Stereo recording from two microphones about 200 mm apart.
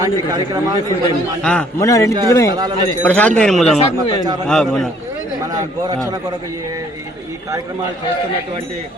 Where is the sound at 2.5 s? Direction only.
20° right (ahead or behind).